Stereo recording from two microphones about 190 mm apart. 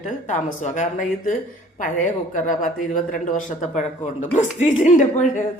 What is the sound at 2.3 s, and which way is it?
Speech, 45° left (ahead or behind).